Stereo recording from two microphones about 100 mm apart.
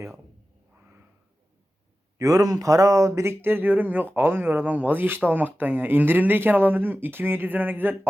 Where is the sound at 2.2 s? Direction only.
35° right (ahead or behind).